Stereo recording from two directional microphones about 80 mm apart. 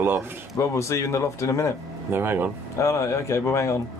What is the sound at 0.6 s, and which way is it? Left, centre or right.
A man's voice, left.